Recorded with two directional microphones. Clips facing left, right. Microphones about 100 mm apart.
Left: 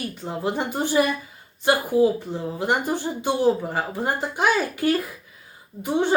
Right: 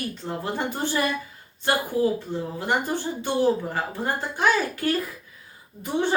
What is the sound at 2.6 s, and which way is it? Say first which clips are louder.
A woman's voice: left 3 dB; 15° left (ahead or behind).